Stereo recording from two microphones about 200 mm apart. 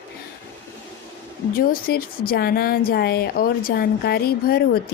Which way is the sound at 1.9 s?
50° left (ahead or behind).